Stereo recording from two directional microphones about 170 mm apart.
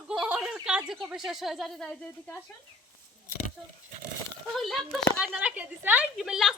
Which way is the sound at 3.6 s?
5° left (ahead or behind).